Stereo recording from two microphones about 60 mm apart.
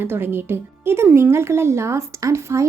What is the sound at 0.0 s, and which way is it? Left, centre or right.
A woman's voice, right.